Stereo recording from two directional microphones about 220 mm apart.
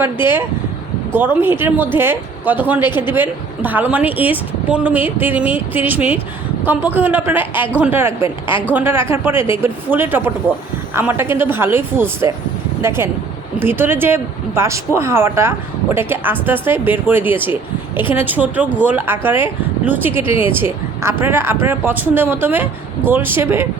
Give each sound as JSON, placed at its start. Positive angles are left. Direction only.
{"t": 0.0, "sound": "speech", "side_deg": -10}
{"t": 13.6, "sound": "speech", "side_deg": -10}